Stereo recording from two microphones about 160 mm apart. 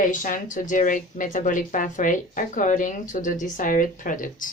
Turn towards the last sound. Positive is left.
turn(degrees=55)  # may be behind; listen again after turning